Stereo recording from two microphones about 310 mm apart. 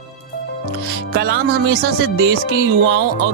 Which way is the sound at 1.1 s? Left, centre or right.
Right.